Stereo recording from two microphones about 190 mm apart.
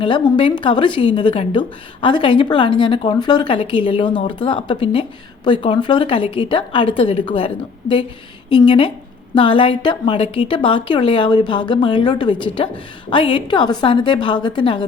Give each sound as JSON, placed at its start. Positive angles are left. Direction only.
{"t": 0.0, "sound": "a woman's voice", "side_deg": 25}